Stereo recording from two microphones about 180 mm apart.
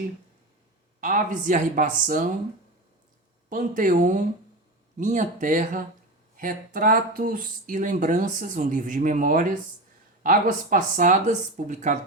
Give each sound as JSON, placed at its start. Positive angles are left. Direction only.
{"t": 1.0, "sound": "speech", "side_deg": -45}
{"t": 3.5, "sound": "speech", "side_deg": -45}